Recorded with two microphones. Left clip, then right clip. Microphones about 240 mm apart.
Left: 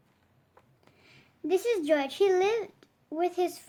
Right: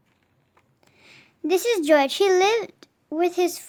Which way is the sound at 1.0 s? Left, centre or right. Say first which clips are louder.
Right 6 dB; right.